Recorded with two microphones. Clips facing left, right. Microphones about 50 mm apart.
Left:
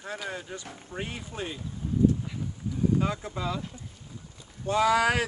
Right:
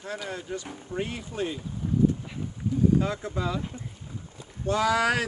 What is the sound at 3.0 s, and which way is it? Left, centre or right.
Speech, left.